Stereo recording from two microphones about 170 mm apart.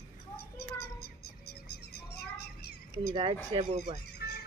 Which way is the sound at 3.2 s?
35° right (ahead or behind).